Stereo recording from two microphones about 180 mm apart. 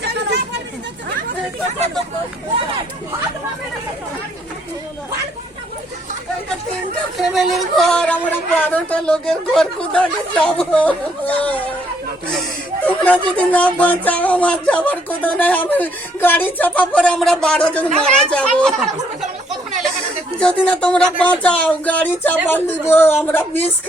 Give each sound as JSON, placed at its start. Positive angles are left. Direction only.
{"t": 0.0, "sound": "chatter", "side_deg": -65}
{"t": 7.2, "sound": "a woman's voice", "side_deg": 0}
{"t": 20.4, "sound": "a woman's voice", "side_deg": 5}